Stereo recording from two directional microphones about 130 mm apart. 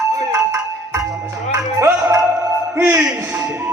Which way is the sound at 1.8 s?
15° right (ahead or behind).